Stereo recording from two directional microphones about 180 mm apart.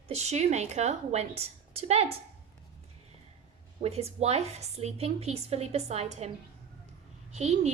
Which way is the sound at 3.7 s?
35° right (ahead or behind).